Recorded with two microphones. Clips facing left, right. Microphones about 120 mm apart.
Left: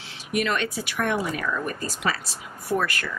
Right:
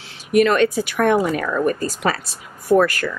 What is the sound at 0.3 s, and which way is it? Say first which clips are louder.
Speech: right 10 dB; 50° right (ahead or behind).